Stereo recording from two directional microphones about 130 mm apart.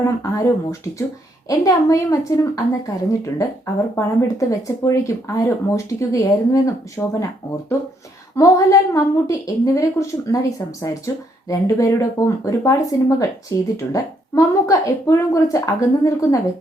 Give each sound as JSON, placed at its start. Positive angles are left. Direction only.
{"t": 0.0, "sound": "speech", "side_deg": 25}
{"t": 8.4, "sound": "speech", "side_deg": 25}